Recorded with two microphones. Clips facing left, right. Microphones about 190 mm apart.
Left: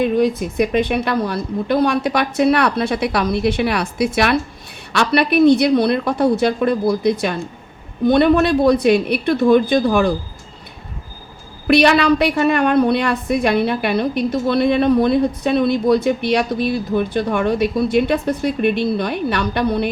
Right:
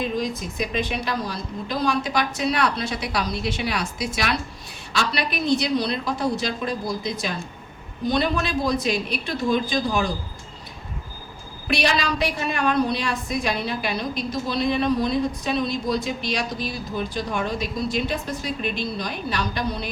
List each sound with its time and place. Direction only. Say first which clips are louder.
0.0 s a woman's voice: left 10 dB; 60° left (ahead or behind)
11.7 s a woman's voice: left 10 dB; 60° left (ahead or behind)